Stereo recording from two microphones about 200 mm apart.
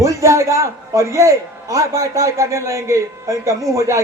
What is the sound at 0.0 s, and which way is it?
A man's voice, 15° right (ahead or behind).